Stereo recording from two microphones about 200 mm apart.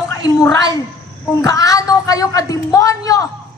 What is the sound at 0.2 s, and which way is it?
A woman's voice, 15° left (ahead or behind).